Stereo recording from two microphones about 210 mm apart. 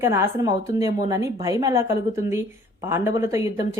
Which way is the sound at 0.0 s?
10° right (ahead or behind).